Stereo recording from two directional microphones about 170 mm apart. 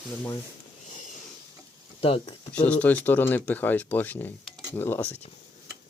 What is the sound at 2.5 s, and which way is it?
Speech, 5° left (ahead or behind).